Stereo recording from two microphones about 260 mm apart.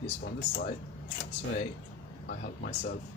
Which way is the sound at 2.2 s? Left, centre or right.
Left.